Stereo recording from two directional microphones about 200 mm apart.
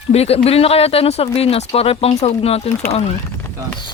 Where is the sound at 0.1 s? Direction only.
30° left (ahead or behind).